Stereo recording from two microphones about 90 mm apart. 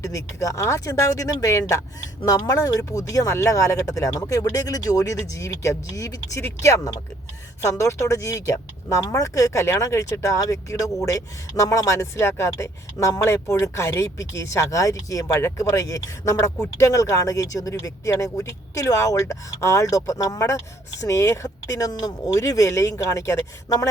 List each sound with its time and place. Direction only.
0.0 s speech: 35° left (ahead or behind)